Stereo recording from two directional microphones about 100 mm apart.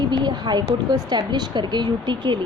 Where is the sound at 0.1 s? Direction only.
45° right (ahead or behind).